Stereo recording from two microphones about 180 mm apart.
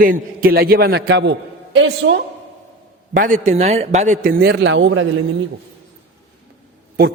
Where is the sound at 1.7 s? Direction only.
90° right.